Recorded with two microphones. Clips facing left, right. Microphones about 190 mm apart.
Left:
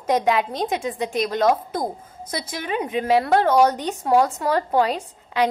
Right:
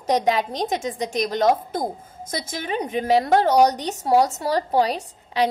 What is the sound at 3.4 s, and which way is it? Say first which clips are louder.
A woman's voice: even; 40° right (ahead or behind).